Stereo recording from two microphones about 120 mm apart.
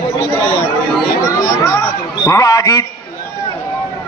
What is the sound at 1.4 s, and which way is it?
Chatter, 30° left (ahead or behind).